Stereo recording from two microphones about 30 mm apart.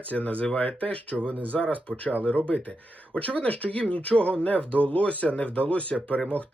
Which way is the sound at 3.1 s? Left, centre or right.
Left.